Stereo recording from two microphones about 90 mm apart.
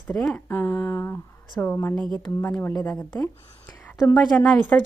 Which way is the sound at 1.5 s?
25° left (ahead or behind).